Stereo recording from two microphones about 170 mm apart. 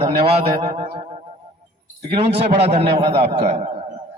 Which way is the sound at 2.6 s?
40° right (ahead or behind).